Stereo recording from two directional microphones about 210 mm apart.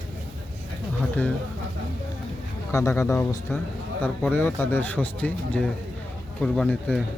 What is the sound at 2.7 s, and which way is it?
A man's voice, 15° left (ahead or behind).